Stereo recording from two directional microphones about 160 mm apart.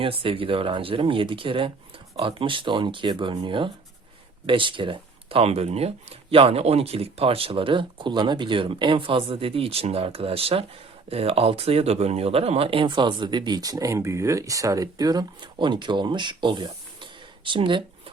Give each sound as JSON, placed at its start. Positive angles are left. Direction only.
{"t": 0.0, "sound": "speech", "side_deg": -35}